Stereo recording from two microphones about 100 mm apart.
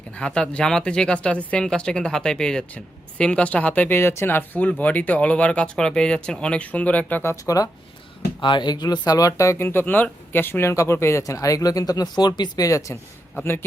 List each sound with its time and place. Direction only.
0.1 s speech: 10° left (ahead or behind); by 7.7 s 35° left (ahead or behind)
8.4 s a man's voice: 50° left (ahead or behind); by 13.7 s 25° left (ahead or behind)